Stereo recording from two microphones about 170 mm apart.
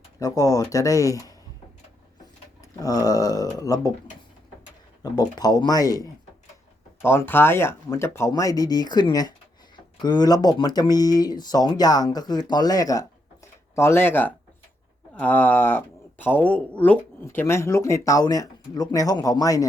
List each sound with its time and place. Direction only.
0.2 s speech: 20° left (ahead or behind)
2.6 s speech: 20° left (ahead or behind)
5.1 s speech: 25° left (ahead or behind)